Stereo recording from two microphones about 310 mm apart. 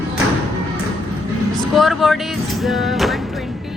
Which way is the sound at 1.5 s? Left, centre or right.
Centre.